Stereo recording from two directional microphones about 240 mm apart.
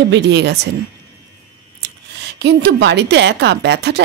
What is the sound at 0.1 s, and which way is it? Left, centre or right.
Speech, right.